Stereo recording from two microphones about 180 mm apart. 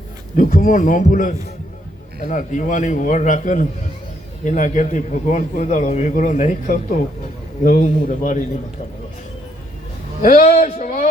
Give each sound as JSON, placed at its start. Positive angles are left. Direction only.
{"t": 0.3, "sound": "a man's voice", "side_deg": 45}
{"t": 10.2, "sound": "a man's voice", "side_deg": 40}